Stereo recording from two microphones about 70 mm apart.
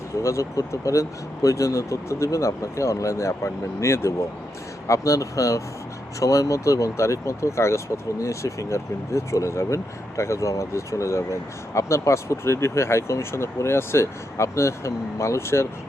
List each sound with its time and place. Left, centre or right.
0.2 s speech: left
4.9 s speech: left